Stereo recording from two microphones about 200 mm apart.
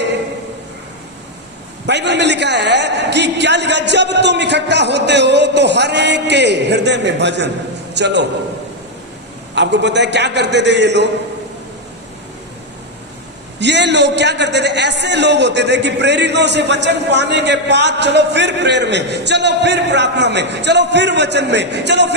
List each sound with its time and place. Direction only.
1.9 s a man's voice: 60° right (ahead or behind)
9.6 s a man's voice: 60° right (ahead or behind)
13.6 s a man's voice: 60° right (ahead or behind)